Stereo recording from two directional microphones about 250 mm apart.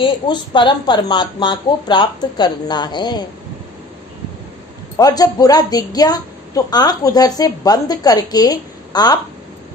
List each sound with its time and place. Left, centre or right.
0.0 s a woman's voice: centre
4.9 s a woman's voice: centre